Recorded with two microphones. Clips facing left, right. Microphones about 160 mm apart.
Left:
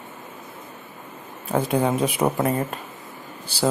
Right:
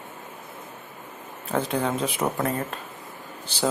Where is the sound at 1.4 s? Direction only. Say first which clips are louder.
Left 4 dB; 10° left (ahead or behind).